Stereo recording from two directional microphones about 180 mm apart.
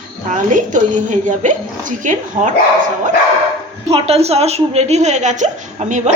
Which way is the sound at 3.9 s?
35° right (ahead or behind).